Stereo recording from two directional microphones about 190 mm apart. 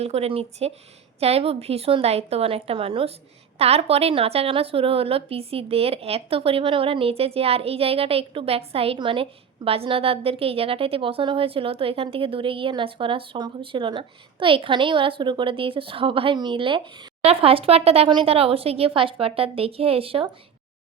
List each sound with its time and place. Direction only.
0.0 s a woman's voice: 35° right (ahead or behind)